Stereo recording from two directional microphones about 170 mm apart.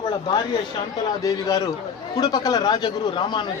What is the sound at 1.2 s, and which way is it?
A man's voice, 20° left (ahead or behind).